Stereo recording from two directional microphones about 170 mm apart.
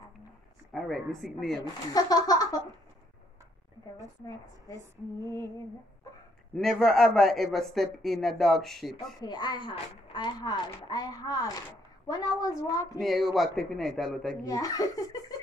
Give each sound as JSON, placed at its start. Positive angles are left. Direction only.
{"t": 0.7, "sound": "speech", "side_deg": 0}
{"t": 1.6, "sound": "speech", "side_deg": 20}
{"t": 5.2, "sound": "female singing", "side_deg": 15}
{"t": 6.5, "sound": "speech", "side_deg": 5}
{"t": 8.9, "sound": "speech", "side_deg": 25}
{"t": 13.0, "sound": "speech", "side_deg": 0}
{"t": 14.4, "sound": "speech", "side_deg": 20}